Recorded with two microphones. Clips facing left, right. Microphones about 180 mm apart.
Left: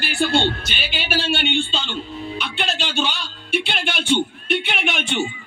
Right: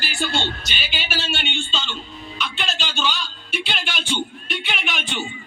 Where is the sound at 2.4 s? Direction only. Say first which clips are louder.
Even; 60° left (ahead or behind).